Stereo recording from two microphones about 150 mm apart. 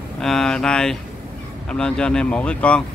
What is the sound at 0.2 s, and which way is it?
Speech, 5° left (ahead or behind).